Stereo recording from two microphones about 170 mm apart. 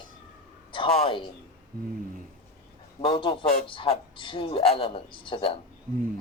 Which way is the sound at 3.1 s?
30° left (ahead or behind).